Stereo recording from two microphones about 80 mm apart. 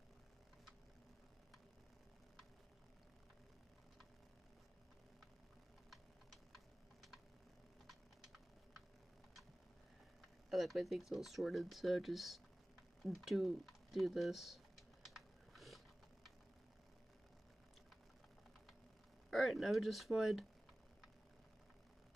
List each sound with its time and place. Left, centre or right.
5.9 s typing: centre
10.5 s speech: centre
13.0 s typing: centre
19.3 s speech: centre